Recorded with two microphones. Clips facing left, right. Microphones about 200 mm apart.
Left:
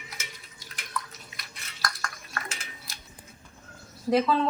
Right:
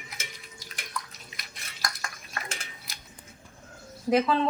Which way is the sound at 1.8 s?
15° right (ahead or behind).